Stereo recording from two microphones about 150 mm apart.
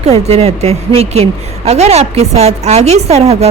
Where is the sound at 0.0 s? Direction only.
45° right (ahead or behind).